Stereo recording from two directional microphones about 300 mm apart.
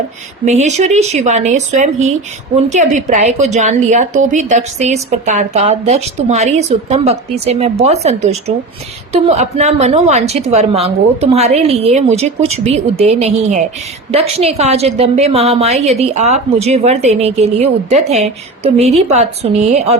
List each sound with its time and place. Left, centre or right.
0.4 s a woman's voice: right